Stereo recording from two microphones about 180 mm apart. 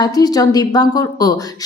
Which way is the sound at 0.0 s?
20° left (ahead or behind).